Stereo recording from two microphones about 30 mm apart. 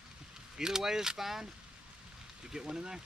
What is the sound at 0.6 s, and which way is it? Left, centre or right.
Speech, centre.